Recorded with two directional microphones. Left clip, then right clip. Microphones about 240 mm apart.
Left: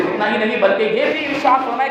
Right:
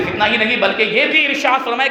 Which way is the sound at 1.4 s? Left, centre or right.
Right.